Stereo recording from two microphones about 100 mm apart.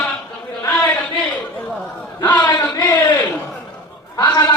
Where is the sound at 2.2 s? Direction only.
15° left (ahead or behind).